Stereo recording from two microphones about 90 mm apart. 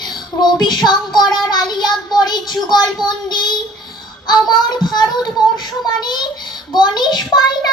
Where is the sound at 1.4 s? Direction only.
50° left (ahead or behind).